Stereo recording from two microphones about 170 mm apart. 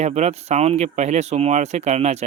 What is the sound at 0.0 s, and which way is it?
Speech, 40° right (ahead or behind).